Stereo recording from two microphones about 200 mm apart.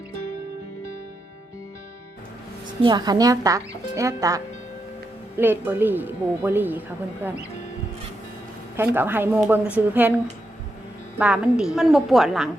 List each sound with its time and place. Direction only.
2.8 s a woman's voice: 20° right (ahead or behind)
5.4 s a woman's voice: 10° right (ahead or behind)
8.7 s a woman's voice: 10° right (ahead or behind)
11.2 s a woman's voice: 5° right (ahead or behind)